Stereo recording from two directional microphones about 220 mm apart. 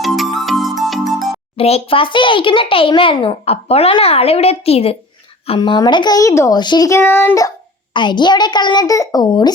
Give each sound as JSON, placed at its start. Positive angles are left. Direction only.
{"t": 0.0, "sound": "music", "side_deg": 0}
{"t": 1.5, "sound": "a child's voice", "side_deg": 25}